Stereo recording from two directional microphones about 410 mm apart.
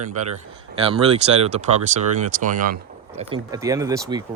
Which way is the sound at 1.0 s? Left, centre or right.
Centre.